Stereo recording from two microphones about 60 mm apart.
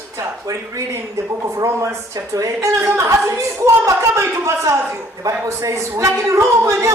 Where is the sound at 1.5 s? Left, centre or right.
Right.